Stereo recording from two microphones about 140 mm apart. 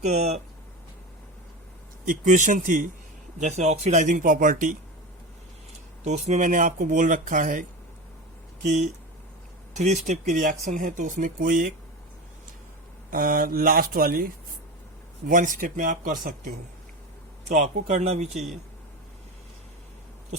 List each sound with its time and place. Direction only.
0.0 s speech: 50° right (ahead or behind)
2.0 s speech: 65° right (ahead or behind)
3.3 s speech: 55° right (ahead or behind); by 4.8 s 70° right (ahead or behind)
6.0 s speech: 55° right (ahead or behind); by 7.6 s 70° right (ahead or behind)
8.6 s speech: 55° right (ahead or behind); by 11.7 s 75° right (ahead or behind)
13.1 s speech: 80° right
15.3 s speech: 75° right (ahead or behind)
17.5 s speech: 60° right (ahead or behind)